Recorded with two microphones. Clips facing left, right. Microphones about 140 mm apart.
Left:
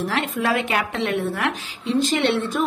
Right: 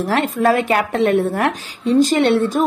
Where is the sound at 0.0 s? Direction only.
45° right (ahead or behind).